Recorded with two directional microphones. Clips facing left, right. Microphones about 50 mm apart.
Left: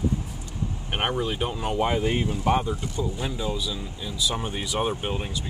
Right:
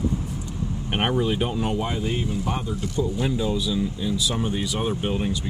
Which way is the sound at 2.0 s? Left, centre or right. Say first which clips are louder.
Left 2 dB; left.